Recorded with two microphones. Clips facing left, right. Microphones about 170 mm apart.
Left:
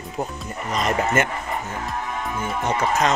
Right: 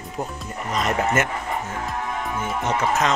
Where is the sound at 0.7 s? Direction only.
Centre (ahead or behind).